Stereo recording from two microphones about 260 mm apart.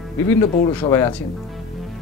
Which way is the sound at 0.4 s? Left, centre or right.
Centre.